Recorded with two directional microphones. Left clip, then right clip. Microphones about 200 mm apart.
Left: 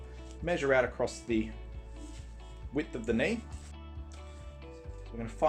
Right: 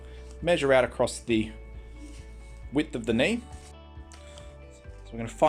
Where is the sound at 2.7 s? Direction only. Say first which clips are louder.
Right 6 dB; 40° right (ahead or behind).